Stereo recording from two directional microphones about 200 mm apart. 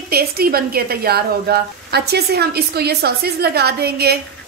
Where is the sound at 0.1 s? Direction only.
50° right (ahead or behind).